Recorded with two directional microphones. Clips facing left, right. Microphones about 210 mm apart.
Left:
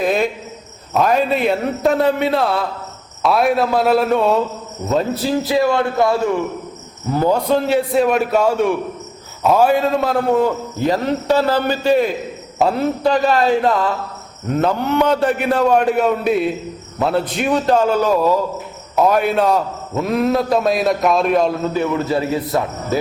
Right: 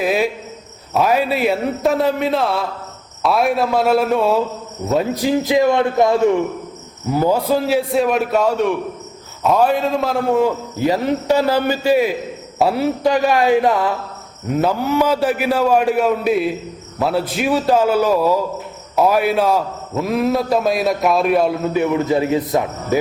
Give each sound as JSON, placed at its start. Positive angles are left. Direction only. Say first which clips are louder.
{"t": 0.0, "sound": "a man's voice", "louder": "even", "side_deg": -5}
{"t": 4.9, "sound": "a man's voice", "louder": "right 1 dB", "side_deg": -15}
{"t": 21.7, "sound": "a man's voice", "louder": "right 2 dB", "side_deg": -15}